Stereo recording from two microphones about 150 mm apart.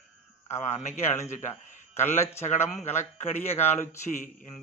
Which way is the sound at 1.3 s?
55° left (ahead or behind).